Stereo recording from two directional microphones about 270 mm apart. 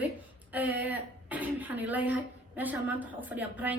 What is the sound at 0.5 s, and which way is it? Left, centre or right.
Speech, centre.